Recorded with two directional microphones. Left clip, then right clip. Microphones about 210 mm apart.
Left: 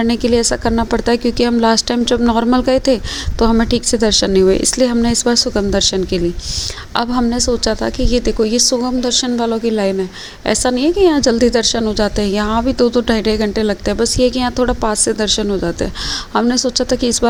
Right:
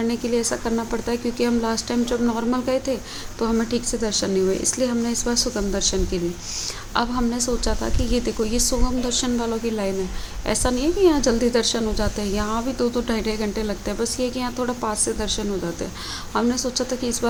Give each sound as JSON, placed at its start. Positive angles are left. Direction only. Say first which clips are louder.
{"t": 0.0, "sound": "speech", "louder": "left 8 dB", "side_deg": 35}
{"t": 6.9, "sound": "a woman's voice", "louder": "left 6 dB", "side_deg": 25}